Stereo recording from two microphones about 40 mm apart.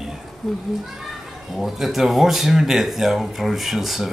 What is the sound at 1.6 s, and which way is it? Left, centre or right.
Speech, centre.